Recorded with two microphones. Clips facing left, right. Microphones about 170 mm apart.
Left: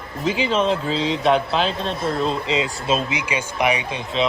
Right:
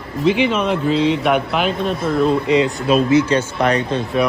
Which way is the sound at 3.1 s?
15° left (ahead or behind).